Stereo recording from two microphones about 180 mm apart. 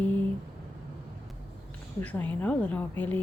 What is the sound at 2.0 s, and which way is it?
Speech, 10° left (ahead or behind).